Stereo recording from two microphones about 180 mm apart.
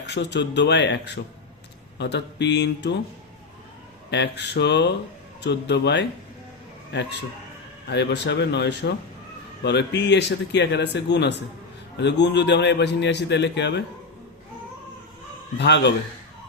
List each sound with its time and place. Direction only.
0.0 s a man's voice: 75° left (ahead or behind)
4.1 s a man's voice: 75° left (ahead or behind)
15.5 s a man's voice: 70° left (ahead or behind)